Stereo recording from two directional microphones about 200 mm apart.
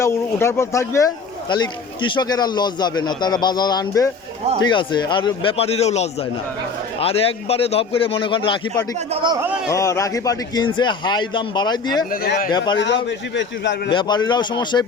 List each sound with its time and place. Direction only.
0.0 s speech: 15° left (ahead or behind)
9.2 s a man's voice: 20° right (ahead or behind)
9.7 s speech: 15° left (ahead or behind)
12.2 s speech: 50° left (ahead or behind)
12.5 s speech: 20° left (ahead or behind)
12.8 s a man's voice: 60° left (ahead or behind)
13.9 s speech: 20° left (ahead or behind)